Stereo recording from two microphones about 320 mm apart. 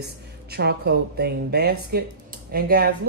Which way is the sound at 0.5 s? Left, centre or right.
Right.